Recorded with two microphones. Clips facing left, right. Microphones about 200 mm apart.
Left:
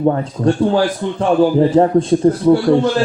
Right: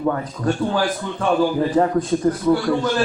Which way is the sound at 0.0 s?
30° left (ahead or behind).